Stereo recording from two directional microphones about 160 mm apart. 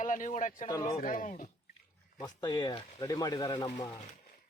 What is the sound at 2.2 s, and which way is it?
Speech, 25° left (ahead or behind).